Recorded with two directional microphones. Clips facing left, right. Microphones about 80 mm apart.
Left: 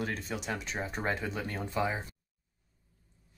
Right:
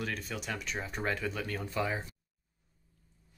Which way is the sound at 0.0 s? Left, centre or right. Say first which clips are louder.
Left 2 dB; left.